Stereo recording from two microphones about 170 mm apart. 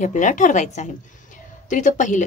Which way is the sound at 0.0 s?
45° left (ahead or behind).